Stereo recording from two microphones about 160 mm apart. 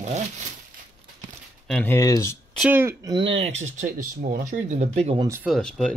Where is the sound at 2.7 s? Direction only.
15° right (ahead or behind).